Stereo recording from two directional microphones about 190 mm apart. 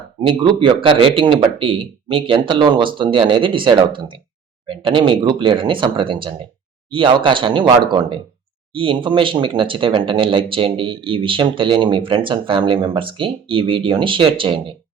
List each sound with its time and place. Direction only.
0.2 s speech: 25° right (ahead or behind)
8.7 s speech: 25° right (ahead or behind)